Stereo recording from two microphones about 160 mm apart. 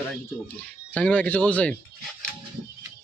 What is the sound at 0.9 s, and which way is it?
Speech, 10° left (ahead or behind).